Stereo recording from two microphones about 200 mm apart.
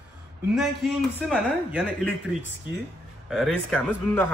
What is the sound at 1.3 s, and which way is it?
Speech, 5° right (ahead or behind).